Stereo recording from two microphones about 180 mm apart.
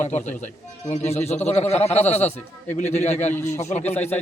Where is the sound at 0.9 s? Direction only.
40° left (ahead or behind).